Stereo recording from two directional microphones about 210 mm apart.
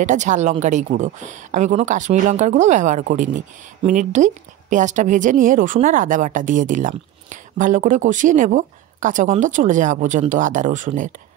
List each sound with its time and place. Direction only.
0.0 s a woman's voice: 35° right (ahead or behind)